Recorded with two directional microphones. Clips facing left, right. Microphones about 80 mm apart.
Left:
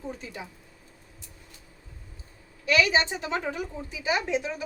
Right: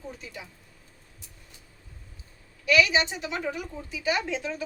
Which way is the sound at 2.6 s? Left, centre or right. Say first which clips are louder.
Even; left.